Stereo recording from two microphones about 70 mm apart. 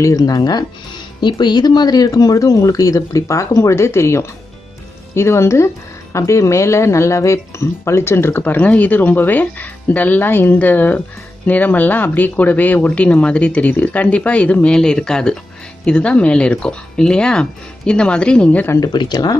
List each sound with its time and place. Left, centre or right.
0.0 s speech: left
1.2 s speech: left; by 18.7 s centre
18.8 s speech: left